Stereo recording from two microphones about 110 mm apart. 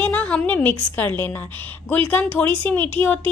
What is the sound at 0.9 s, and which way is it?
A woman's voice, 15° left (ahead or behind).